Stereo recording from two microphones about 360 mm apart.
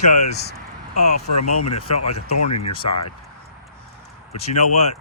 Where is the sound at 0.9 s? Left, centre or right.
Left.